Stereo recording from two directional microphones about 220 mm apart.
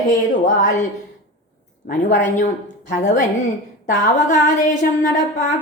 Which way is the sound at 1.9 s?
35° left (ahead or behind).